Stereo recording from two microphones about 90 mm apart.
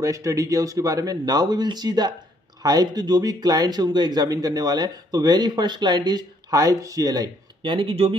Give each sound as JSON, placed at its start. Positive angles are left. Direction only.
{"t": 0.0, "sound": "speech", "side_deg": -35}
{"t": 7.6, "sound": "speech", "side_deg": -75}